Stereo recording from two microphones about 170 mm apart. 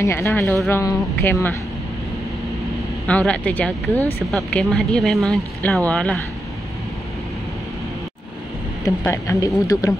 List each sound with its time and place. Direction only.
0.0 s speech: 15° left (ahead or behind)
3.1 s speech: 10° left (ahead or behind)
8.8 s speech: 20° left (ahead or behind)